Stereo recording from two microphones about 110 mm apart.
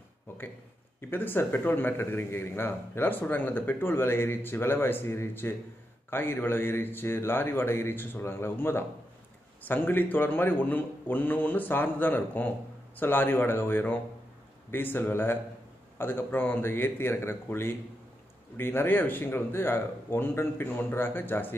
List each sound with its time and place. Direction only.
1.1 s speech: 20° left (ahead or behind)